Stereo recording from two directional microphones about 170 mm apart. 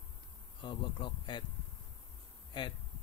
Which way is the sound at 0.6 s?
25° left (ahead or behind).